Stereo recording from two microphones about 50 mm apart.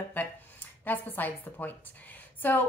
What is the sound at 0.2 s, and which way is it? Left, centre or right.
A woman's voice, left.